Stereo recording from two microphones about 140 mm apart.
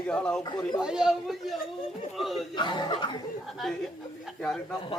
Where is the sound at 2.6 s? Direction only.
30° left (ahead or behind).